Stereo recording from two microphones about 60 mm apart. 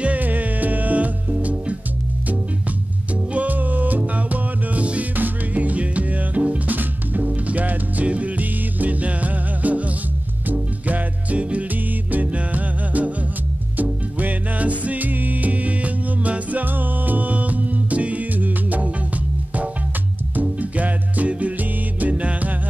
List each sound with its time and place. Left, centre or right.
0.0 s music: right
3.3 s music: right
20.3 s music: right